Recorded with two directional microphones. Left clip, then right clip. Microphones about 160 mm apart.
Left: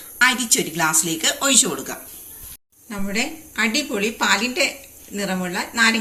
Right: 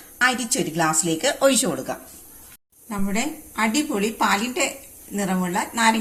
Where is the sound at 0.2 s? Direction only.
40° right (ahead or behind).